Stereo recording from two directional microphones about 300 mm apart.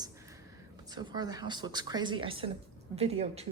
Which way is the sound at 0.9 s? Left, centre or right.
Centre.